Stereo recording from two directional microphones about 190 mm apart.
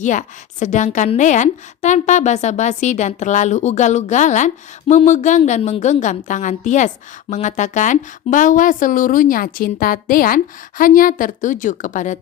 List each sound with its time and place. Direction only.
0.0 s a woman's voice: 40° left (ahead or behind)